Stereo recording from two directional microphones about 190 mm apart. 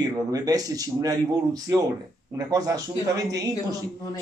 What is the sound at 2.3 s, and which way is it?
A man's voice, 20° right (ahead or behind).